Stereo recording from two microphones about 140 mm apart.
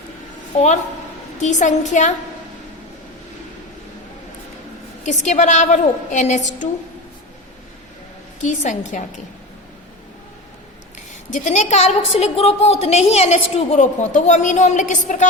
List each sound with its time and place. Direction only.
1.4 s a woman's voice: 60° left (ahead or behind)
5.0 s a woman's voice: 55° left (ahead or behind)
8.4 s a woman's voice: 60° left (ahead or behind)
11.3 s a woman's voice: 60° left (ahead or behind)